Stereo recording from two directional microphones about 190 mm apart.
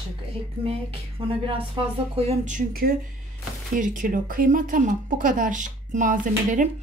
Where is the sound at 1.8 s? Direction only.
25° right (ahead or behind).